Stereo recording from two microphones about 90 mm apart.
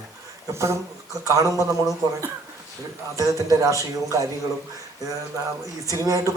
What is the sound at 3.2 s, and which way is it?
A man's voice, 40° right (ahead or behind).